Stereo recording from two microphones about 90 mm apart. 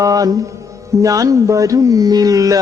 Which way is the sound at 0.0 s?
40° right (ahead or behind).